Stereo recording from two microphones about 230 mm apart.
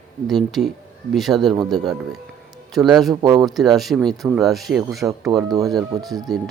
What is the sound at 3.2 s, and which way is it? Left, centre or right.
Speech, centre.